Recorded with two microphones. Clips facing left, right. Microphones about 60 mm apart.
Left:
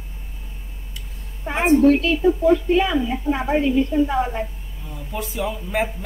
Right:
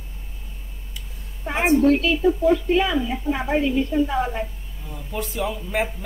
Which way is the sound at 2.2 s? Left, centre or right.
Centre.